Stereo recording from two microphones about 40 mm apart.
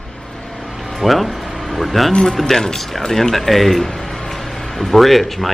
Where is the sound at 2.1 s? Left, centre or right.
Centre.